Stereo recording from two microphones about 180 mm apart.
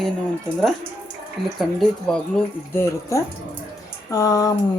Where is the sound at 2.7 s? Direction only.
15° left (ahead or behind).